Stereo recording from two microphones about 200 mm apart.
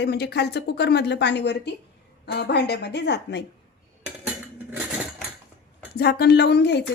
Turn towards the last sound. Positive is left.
turn(degrees=55)  # may be behind; listen again after turning